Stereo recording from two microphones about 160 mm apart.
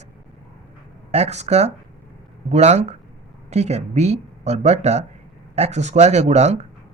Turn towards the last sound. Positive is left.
turn(degrees=-45)  # may be behind; listen again after turning